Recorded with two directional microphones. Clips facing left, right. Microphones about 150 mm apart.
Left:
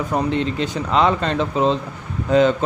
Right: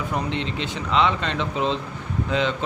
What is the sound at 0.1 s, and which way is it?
A man's voice, 45° left (ahead or behind).